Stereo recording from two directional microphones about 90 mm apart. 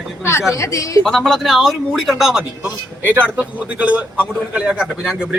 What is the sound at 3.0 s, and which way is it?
A man's voice, 20° right (ahead or behind).